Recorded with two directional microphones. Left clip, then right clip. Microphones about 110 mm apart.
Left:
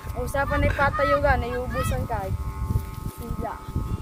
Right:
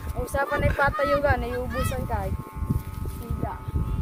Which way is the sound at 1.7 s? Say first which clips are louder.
Left 1 dB; 40° right (ahead or behind).